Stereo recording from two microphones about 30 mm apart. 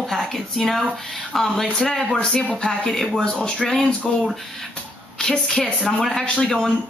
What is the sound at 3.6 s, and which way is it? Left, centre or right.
Speech, centre.